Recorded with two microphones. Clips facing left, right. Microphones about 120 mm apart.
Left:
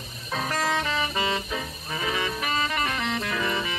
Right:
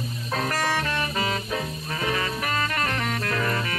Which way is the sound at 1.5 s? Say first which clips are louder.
Right 3 dB; 5° left (ahead or behind).